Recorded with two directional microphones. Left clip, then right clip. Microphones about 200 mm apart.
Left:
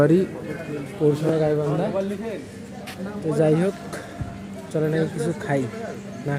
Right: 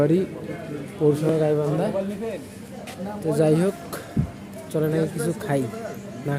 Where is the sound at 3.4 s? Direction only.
15° right (ahead or behind).